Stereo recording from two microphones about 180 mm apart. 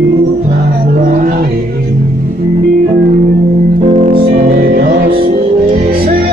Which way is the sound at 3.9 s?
35° right (ahead or behind).